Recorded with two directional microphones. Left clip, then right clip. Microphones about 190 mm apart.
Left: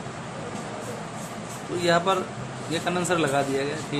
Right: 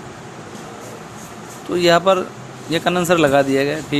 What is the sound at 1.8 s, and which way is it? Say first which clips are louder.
Speech: right 8 dB; 45° right (ahead or behind).